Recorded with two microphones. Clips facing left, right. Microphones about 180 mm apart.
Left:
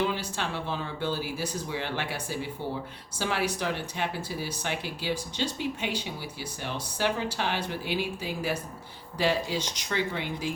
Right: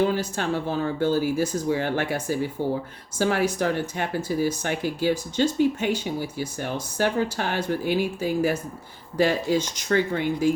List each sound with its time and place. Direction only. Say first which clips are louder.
0.0 s speech: right 6 dB; 45° right (ahead or behind)